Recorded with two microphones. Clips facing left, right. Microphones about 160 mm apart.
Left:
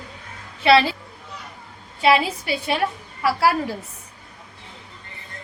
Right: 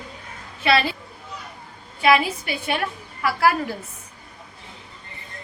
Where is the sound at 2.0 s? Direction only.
30° left (ahead or behind).